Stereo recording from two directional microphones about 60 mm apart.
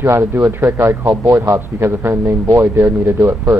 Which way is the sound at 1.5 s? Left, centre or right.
Right.